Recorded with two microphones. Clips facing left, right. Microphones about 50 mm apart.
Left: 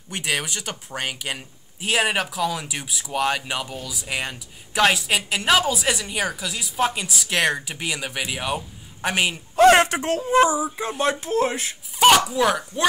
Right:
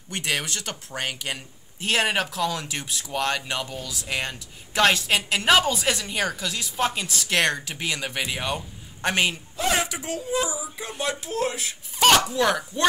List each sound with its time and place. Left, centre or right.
0.1 s speech: centre
9.6 s speech: left
12.3 s speech: centre